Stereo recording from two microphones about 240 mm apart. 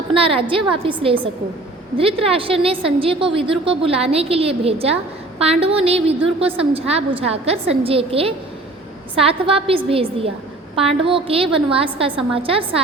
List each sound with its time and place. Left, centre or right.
0.1 s a woman's voice: right